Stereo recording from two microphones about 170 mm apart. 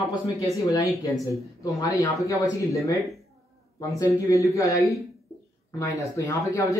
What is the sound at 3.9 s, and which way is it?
Speech, 20° left (ahead or behind).